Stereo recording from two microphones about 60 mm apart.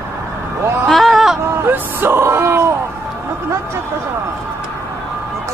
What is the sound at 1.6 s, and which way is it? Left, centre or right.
Speech, right.